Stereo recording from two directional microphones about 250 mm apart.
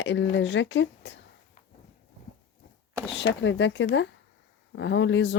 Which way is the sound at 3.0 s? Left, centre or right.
Left.